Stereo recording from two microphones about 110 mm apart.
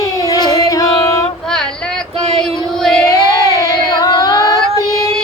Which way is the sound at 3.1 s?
30° left (ahead or behind).